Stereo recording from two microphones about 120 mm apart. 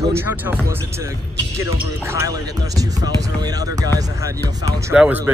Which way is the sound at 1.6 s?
25° right (ahead or behind).